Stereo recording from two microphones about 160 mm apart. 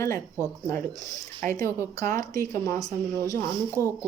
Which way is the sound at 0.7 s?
15° left (ahead or behind).